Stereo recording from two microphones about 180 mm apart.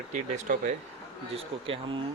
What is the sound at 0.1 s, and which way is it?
Speech, 45° right (ahead or behind).